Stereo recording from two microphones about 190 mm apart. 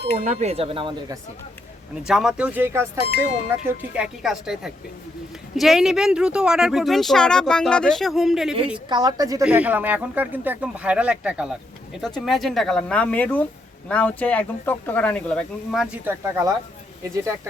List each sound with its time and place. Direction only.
0.3 s speech: 35° right (ahead or behind)
2.0 s speech: centre (ahead or behind)
8.9 s a woman's voice: 20° right (ahead or behind)
9.4 s speech: 10° right (ahead or behind)